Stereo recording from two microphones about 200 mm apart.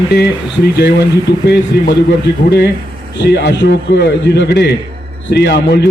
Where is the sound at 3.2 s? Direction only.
55° left (ahead or behind).